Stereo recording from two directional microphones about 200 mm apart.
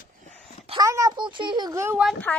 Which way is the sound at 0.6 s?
20° right (ahead or behind).